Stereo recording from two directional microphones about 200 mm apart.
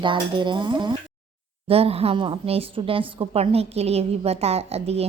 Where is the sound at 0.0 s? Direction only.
25° right (ahead or behind).